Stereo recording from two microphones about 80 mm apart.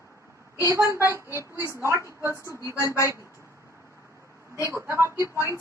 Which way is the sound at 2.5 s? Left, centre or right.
Left.